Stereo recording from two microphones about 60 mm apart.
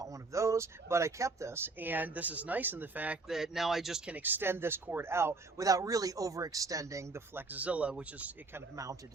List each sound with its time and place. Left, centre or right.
0.0 s speech: right
1.5 s speech: right
3.2 s speech: centre
4.0 s speech: right
5.5 s speech: right
7.3 s speech: right
8.7 s speech: right